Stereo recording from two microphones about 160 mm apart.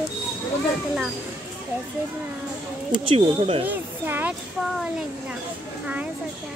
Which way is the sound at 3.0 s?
35° right (ahead or behind).